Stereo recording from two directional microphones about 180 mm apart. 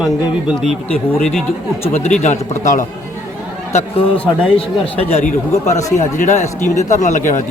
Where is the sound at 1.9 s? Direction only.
40° left (ahead or behind).